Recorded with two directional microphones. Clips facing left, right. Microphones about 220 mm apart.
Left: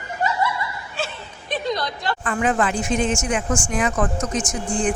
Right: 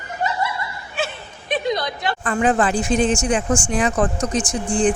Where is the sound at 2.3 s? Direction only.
35° right (ahead or behind).